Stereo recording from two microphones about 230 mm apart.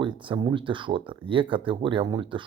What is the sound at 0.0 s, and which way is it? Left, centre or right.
Speech, centre.